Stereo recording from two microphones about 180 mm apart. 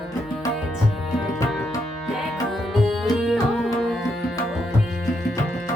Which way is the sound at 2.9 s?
Centre (ahead or behind).